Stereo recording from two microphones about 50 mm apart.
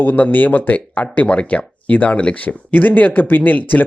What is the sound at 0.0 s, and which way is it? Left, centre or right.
Speech, left.